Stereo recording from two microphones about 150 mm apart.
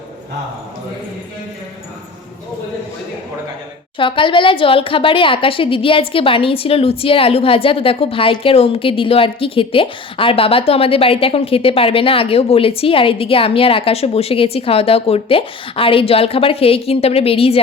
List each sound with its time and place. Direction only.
3.9 s a woman's voice: 35° left (ahead or behind)